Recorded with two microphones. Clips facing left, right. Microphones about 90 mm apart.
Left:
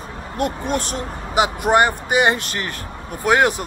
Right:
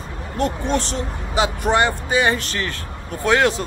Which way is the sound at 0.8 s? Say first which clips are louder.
Right 1 dB; 25° right (ahead or behind).